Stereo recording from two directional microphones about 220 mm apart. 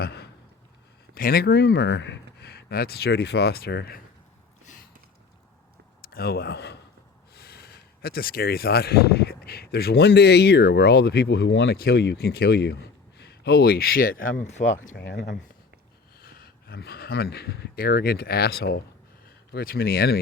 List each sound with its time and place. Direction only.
0.0 s a sound: 45° left (ahead or behind)
1.1 s speech: 45° left (ahead or behind)
6.1 s a man's voice: 45° left (ahead or behind)
16.2 s speech: 45° left (ahead or behind)